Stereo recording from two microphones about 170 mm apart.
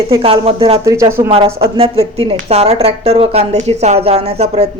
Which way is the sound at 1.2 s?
35° right (ahead or behind).